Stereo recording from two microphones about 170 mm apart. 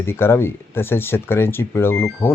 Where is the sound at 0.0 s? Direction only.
15° left (ahead or behind).